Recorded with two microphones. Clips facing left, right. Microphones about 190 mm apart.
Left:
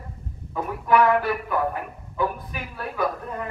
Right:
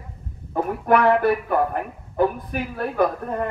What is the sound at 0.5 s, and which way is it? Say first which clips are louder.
Speech: right 3 dB; 55° right (ahead or behind).